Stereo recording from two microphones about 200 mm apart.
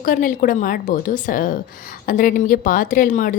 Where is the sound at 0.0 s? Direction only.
40° left (ahead or behind).